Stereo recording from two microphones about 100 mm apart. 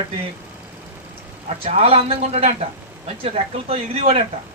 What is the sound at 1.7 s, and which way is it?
Speech, 85° right.